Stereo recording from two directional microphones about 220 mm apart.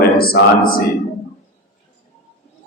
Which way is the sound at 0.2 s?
45° left (ahead or behind).